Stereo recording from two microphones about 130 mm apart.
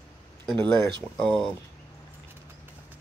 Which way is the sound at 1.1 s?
5° left (ahead or behind).